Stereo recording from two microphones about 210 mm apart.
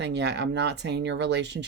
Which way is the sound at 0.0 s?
55° right (ahead or behind).